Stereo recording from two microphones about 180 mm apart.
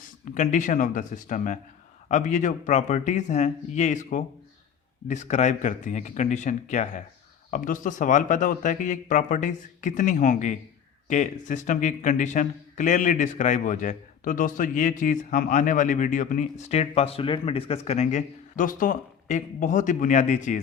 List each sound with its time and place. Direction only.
0.3 s speech: 45° left (ahead or behind)